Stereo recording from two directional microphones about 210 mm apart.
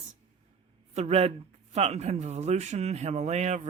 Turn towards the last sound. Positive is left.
turn(degrees=-35)  # may be behind; listen again after turning